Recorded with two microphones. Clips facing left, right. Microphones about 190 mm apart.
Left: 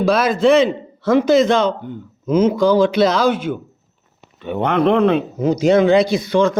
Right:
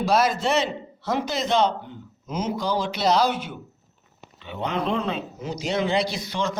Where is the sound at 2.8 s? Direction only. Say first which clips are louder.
Left 7 dB; 90° left.